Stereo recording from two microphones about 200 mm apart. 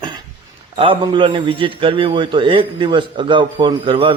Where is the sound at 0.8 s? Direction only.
25° right (ahead or behind).